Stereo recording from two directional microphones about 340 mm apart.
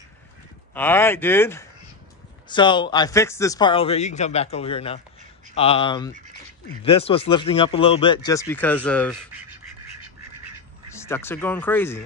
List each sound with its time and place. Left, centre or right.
0.7 s a man's voice: centre
10.9 s speech: centre